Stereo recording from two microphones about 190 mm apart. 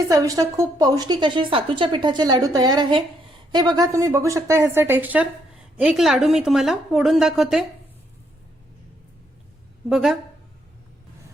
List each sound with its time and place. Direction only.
0.1 s a woman's voice: 20° right (ahead or behind); by 7.6 s centre (ahead or behind)
9.9 s a woman's voice: centre (ahead or behind)